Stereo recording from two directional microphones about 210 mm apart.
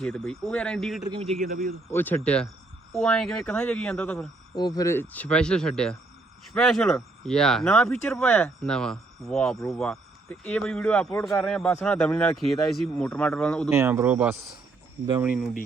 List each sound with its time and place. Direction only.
0.0 s speech: 5° left (ahead or behind)
1.0 s a man's voice: 25° right (ahead or behind)
1.5 s speech: 45° right (ahead or behind)
1.9 s speech: 10° left (ahead or behind)
4.5 s speech: 20° left (ahead or behind)
13.7 s speech: 10° right (ahead or behind)